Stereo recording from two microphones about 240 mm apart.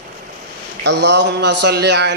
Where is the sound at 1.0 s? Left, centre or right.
Right.